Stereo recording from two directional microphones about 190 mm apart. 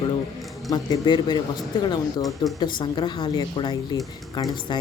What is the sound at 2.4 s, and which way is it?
Speech, 20° left (ahead or behind).